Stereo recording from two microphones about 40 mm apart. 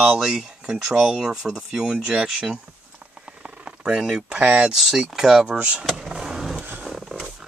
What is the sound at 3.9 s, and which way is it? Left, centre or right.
Speech, right.